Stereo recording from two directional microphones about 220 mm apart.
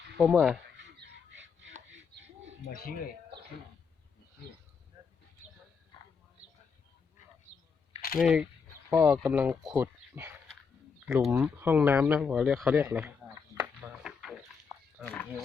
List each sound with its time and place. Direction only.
0.2 s speech: 5° right (ahead or behind)
0.8 s chopping: 55° right (ahead or behind)
8.2 s speech: 5° right (ahead or behind)